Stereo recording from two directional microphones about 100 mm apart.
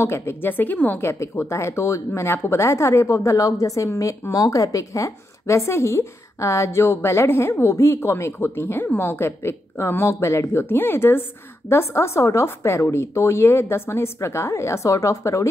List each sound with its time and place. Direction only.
0.0 s a woman's voice: 25° left (ahead or behind)